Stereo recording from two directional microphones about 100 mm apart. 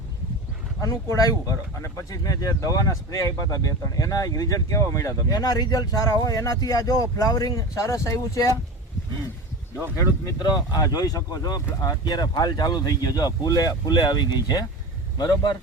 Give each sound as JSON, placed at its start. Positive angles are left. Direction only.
{"t": 0.8, "sound": "speech", "side_deg": 30}
{"t": 9.9, "sound": "speech", "side_deg": 35}
{"t": 10.3, "sound": "speech", "side_deg": 45}